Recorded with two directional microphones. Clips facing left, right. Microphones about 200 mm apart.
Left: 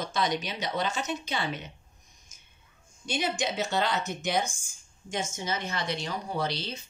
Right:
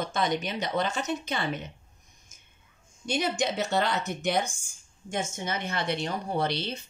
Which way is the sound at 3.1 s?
55° right (ahead or behind).